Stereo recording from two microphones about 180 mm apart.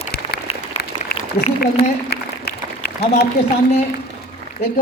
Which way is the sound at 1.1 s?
65° left (ahead or behind).